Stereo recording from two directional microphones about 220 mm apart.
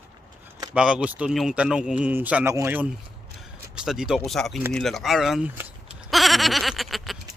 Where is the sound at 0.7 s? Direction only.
5° right (ahead or behind).